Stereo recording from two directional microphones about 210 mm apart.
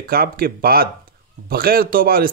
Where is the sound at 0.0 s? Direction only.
45° right (ahead or behind).